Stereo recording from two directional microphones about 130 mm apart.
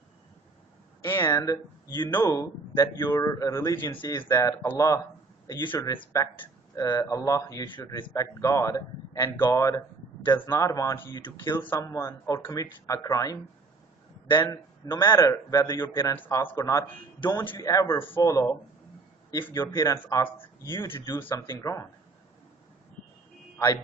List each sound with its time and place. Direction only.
1.0 s speech: 20° left (ahead or behind)
3.8 s speech: 35° left (ahead or behind)
4.2 s speech: 20° left (ahead or behind)
5.8 s speech: 20° left (ahead or behind)
14.4 s a man's voice: 30° left (ahead or behind)
19.5 s speech: 30° left (ahead or behind)